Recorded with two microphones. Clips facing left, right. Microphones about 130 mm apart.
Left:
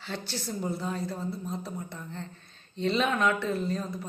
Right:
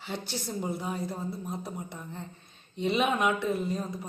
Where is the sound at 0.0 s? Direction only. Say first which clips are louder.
Even; 15° right (ahead or behind).